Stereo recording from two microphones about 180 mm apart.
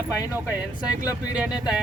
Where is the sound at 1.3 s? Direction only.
5° right (ahead or behind).